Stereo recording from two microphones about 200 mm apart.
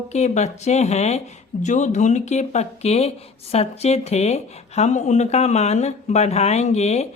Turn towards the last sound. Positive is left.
turn(degrees=30)  # may be behind; listen again after turning